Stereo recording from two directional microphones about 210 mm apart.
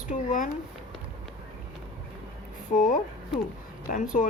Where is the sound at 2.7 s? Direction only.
40° left (ahead or behind).